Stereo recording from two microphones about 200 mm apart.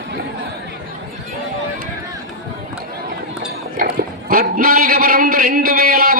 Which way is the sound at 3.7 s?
45° right (ahead or behind).